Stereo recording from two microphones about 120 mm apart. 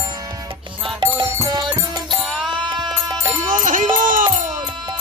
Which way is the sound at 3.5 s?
90° right.